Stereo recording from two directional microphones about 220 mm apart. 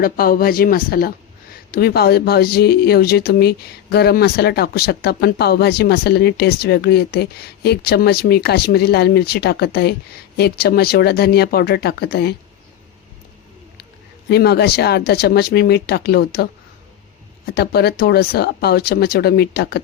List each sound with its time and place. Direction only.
0.0 s speech: 40° left (ahead or behind)
14.3 s speech: 50° left (ahead or behind)